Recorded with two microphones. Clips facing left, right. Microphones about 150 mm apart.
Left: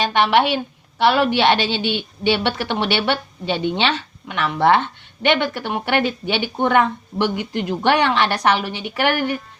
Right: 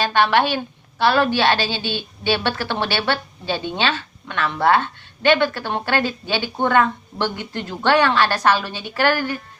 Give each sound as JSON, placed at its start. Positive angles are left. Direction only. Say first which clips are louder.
{"t": 0.0, "sound": "a woman's voice", "louder": "left 1 dB", "side_deg": 20}